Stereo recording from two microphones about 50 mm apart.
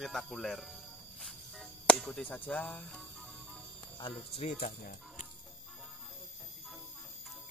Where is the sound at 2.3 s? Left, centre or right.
Left.